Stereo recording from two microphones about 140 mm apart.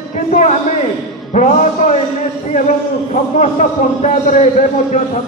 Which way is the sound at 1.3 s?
60° left (ahead or behind).